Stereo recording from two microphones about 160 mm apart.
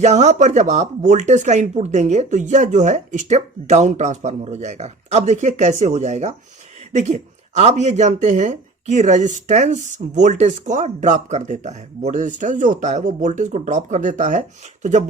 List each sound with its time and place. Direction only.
0.0 s speech: 45° right (ahead or behind)